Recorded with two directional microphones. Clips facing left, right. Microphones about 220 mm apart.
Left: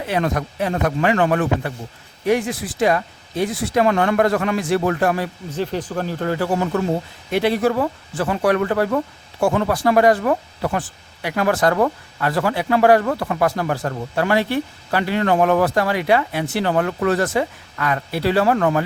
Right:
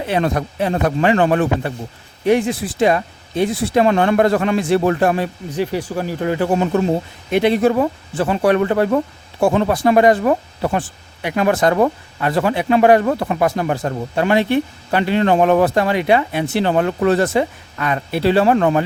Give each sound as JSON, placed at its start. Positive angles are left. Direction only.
{"t": 0.0, "sound": "speech", "side_deg": -30}
{"t": 5.5, "sound": "speech", "side_deg": -10}